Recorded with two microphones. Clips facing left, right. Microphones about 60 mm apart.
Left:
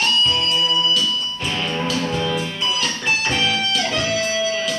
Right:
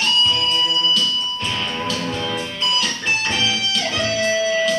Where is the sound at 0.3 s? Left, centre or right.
Centre.